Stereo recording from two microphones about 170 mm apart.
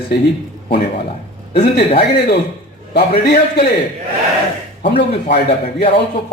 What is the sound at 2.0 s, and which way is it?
A man's voice, 70° left (ahead or behind).